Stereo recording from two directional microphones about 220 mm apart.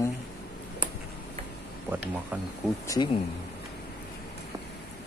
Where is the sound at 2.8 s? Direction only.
20° left (ahead or behind).